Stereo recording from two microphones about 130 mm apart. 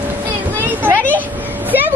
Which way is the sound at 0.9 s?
10° left (ahead or behind).